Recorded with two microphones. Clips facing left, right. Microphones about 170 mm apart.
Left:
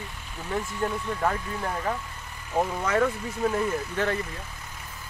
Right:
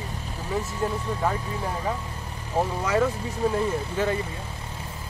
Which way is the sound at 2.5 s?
5° right (ahead or behind).